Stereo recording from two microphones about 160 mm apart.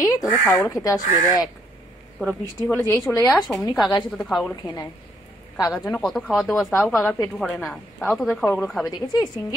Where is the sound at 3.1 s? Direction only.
5° left (ahead or behind).